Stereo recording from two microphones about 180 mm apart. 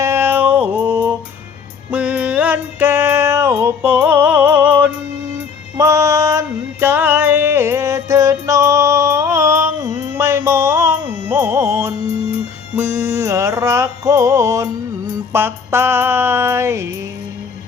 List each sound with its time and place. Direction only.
0.0 s cat: 15° right (ahead or behind)
1.9 s music: 10° right (ahead or behind)